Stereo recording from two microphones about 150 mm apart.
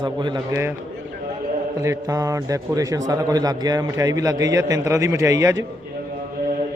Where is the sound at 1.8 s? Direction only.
20° right (ahead or behind).